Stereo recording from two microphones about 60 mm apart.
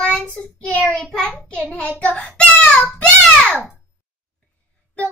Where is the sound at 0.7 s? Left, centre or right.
Left.